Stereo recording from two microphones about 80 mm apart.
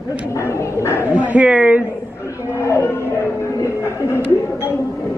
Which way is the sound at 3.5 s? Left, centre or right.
Left.